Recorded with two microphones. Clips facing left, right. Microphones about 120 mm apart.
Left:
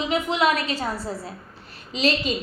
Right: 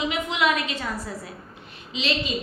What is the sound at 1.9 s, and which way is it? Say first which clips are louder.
Speech: left 5 dB; 40° left (ahead or behind).